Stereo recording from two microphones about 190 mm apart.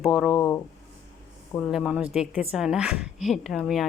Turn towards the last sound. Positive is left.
turn(degrees=0)  # may be behind; listen again after turning